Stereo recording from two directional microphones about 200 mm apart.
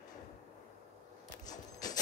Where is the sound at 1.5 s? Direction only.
20° left (ahead or behind).